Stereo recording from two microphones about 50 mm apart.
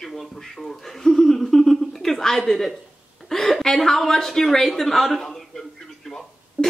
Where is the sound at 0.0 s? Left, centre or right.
Centre.